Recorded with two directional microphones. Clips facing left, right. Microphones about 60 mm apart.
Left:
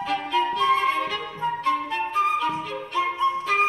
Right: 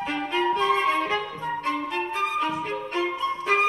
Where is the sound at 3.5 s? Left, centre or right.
Right.